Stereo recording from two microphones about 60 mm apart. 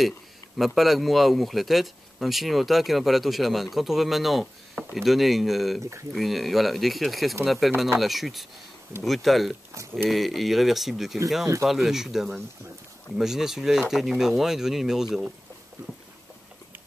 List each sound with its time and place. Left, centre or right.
0.7 s speech: centre